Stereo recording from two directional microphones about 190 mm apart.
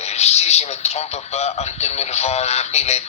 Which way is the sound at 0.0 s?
35° left (ahead or behind).